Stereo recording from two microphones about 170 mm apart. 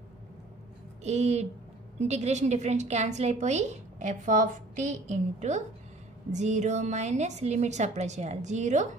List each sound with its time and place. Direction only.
1.0 s a woman's voice: 40° right (ahead or behind)